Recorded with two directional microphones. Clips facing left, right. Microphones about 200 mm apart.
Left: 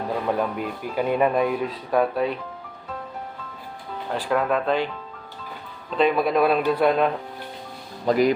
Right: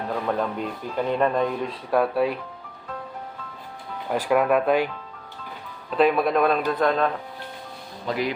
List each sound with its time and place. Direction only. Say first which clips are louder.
0.3 s speech: left 1 dB; 10° left (ahead or behind)
4.1 s speech: right 3 dB; 10° right (ahead or behind)
6.0 s speech: even; centre (ahead or behind)
8.0 s speech: left 7 dB; 45° left (ahead or behind)